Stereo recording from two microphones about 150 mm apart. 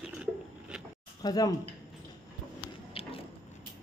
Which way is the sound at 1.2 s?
25° left (ahead or behind).